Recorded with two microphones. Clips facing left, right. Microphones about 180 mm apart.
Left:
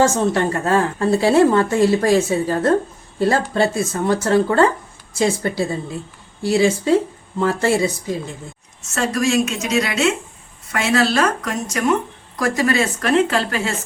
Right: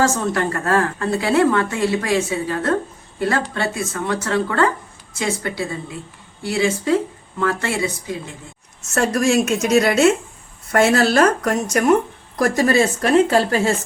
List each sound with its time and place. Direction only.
0.0 s a woman's voice: 25° left (ahead or behind)
1.2 s a woman's voice: 35° left (ahead or behind)
9.0 s speech: 55° right (ahead or behind)
12.4 s speech: 40° right (ahead or behind)